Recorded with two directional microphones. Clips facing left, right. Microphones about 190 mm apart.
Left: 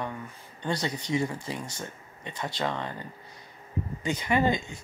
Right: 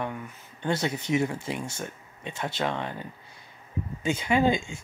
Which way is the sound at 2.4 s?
25° right (ahead or behind).